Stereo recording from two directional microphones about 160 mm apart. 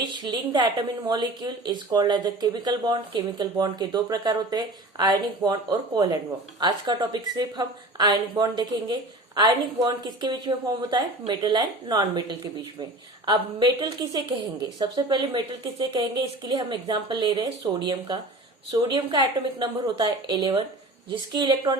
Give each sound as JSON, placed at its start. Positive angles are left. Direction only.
{"t": 0.0, "sound": "a woman's voice", "side_deg": -30}